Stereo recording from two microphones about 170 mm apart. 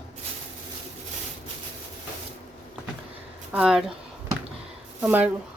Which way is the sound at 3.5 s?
5° right (ahead or behind).